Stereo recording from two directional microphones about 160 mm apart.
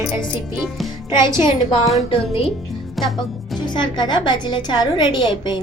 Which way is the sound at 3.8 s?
30° left (ahead or behind).